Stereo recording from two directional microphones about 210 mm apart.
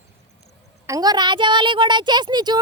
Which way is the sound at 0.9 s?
20° right (ahead or behind).